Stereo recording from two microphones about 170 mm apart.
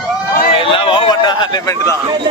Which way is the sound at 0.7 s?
30° left (ahead or behind).